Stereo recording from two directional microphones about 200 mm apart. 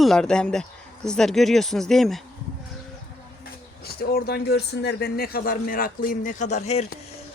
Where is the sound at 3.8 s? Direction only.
50° left (ahead or behind).